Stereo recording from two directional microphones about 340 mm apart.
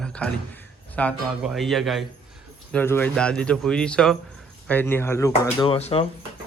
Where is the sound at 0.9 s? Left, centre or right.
Centre.